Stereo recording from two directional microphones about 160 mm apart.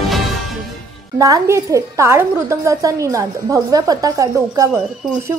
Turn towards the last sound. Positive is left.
turn(degrees=-20)  # may be behind; listen again after turning